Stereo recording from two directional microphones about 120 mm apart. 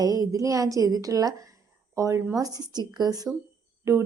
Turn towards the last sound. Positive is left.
turn(degrees=-25)  # may be behind; listen again after turning